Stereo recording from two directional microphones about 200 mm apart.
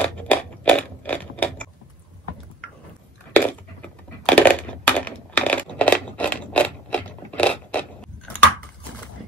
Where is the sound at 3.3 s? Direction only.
5° left (ahead or behind).